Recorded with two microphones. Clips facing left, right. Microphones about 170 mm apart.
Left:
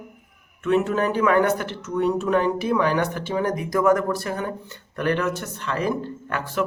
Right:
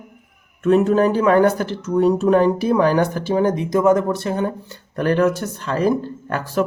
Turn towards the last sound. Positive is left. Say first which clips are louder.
# right 5 dB
turn(degrees=-40)  # may be behind; listen again after turning